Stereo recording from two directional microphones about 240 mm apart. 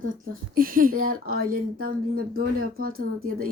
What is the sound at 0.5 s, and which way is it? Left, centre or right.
A woman's voice, right.